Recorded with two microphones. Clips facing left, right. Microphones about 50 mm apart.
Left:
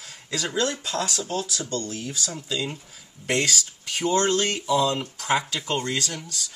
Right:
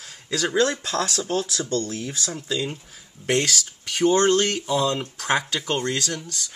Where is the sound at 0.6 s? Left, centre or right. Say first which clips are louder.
Right 4 dB; right.